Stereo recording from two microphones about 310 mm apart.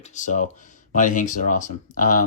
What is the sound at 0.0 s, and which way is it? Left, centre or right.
Speech, left.